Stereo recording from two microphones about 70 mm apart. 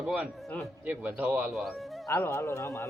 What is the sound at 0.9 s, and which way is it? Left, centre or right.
Speech, right.